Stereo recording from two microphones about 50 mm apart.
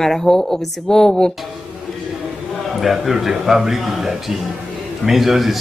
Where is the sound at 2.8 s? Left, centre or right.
Centre.